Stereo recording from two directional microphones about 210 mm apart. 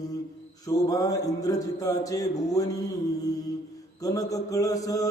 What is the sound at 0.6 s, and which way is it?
Music, 15° left (ahead or behind).